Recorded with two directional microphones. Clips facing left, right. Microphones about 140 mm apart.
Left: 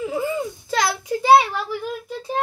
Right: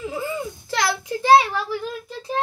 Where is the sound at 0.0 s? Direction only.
10° left (ahead or behind).